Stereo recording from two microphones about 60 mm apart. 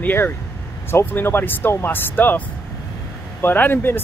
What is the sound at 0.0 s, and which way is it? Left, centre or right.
Speech, left.